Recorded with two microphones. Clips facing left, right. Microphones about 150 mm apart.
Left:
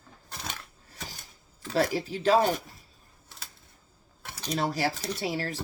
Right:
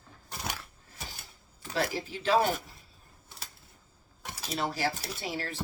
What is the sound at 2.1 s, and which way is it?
Speech, 40° left (ahead or behind).